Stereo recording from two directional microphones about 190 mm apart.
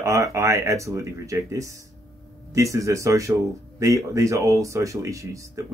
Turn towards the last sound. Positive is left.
turn(degrees=-15)  # may be behind; listen again after turning